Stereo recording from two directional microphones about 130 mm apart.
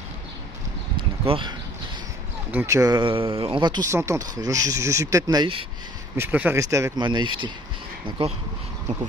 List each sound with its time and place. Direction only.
1.2 s speech: 45° right (ahead or behind)
2.6 s speech: 25° right (ahead or behind)
3.0 s speech: 45° right (ahead or behind)
3.9 s speech: 25° right (ahead or behind)
6.1 s speech: 15° right (ahead or behind)
7.1 s speech: 35° right (ahead or behind)